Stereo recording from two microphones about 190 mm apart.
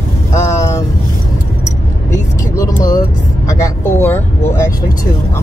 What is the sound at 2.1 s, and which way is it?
Speech, 15° left (ahead or behind).